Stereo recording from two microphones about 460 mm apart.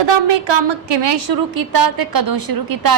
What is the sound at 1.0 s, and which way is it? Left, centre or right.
A woman's voice, right.